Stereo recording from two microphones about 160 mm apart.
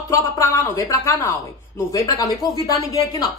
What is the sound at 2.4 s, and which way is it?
Speech, 25° left (ahead or behind).